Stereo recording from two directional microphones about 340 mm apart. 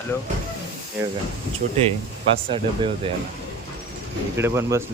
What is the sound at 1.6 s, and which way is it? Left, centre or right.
Speech, right.